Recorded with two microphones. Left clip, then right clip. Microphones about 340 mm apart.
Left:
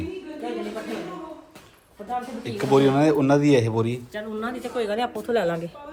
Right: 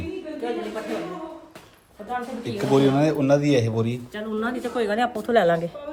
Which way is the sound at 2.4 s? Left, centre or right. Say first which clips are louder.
Left 1 dB; centre.